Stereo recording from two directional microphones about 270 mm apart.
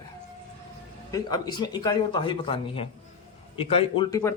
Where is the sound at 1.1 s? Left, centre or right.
Centre.